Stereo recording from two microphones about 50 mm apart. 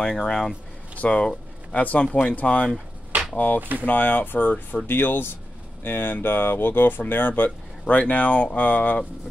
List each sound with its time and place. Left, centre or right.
0.0 s speech: centre
0.9 s a sound: left
1.8 s speech: left
3.3 s speech: left
7.8 s speech: left